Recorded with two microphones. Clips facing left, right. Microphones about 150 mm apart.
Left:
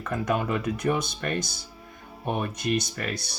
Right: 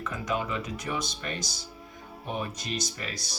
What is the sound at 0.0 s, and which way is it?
Speech, 55° left (ahead or behind).